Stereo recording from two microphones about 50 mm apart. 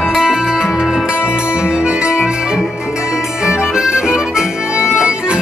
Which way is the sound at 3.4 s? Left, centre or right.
Centre.